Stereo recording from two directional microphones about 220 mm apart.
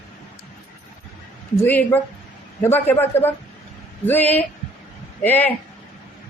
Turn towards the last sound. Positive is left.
turn(degrees=10)  # may be behind; listen again after turning